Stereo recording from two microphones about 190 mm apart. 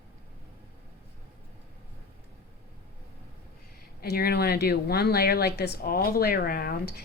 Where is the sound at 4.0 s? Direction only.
55° left (ahead or behind).